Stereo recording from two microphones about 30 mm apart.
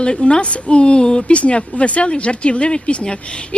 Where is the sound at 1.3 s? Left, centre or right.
Left.